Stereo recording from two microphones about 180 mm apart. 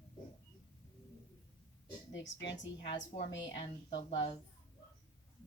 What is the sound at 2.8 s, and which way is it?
A woman's voice, 25° left (ahead or behind).